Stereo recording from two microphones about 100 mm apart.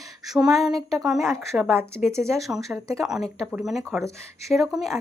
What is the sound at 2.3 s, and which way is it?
Speech, centre (ahead or behind).